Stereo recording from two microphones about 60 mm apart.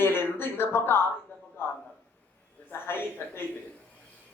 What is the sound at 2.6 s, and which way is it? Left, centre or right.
Speech, left.